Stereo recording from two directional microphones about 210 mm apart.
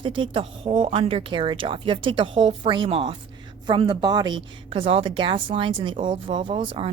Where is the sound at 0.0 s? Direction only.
25° right (ahead or behind).